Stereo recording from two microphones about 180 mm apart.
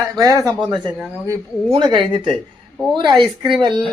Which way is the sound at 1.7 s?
25° right (ahead or behind).